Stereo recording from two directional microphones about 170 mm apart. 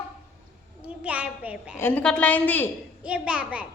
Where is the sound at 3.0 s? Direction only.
5° right (ahead or behind).